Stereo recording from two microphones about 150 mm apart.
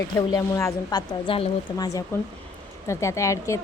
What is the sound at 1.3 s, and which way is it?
Speech, 35° left (ahead or behind).